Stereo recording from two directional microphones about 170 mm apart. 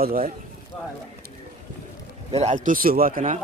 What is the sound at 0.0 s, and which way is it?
Speech, 60° right (ahead or behind).